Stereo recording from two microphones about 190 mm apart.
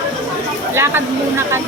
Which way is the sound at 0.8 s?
15° right (ahead or behind).